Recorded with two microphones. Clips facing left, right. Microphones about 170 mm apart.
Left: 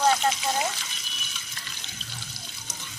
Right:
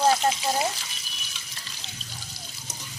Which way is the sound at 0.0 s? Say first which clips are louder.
Right 1 dB; 30° right (ahead or behind).